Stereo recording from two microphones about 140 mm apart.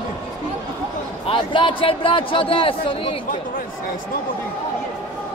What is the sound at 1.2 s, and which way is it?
A man's voice, 40° left (ahead or behind).